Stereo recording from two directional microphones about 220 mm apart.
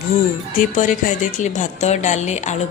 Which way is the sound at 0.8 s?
35° left (ahead or behind).